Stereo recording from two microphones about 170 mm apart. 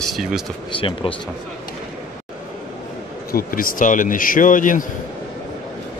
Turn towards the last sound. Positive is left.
turn(degrees=50)  # may be behind; listen again after turning